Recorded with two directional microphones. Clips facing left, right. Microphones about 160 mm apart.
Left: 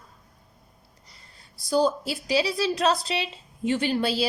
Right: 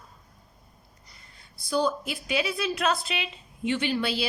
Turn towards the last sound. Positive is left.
turn(degrees=40)  # may be behind; listen again after turning